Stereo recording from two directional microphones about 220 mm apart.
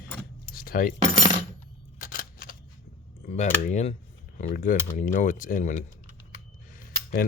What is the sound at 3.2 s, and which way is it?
Speech, 35° left (ahead or behind).